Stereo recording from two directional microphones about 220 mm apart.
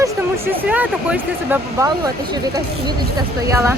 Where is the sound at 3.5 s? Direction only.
15° right (ahead or behind).